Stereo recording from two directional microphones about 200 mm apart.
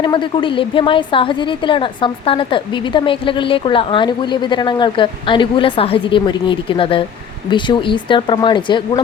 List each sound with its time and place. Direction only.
0.0 s a woman's voice: 25° left (ahead or behind)